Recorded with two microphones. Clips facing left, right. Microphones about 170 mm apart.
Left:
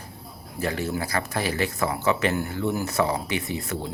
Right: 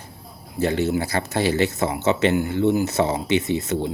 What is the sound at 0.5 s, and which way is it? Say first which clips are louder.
Speech: right 6 dB; 25° right (ahead or behind).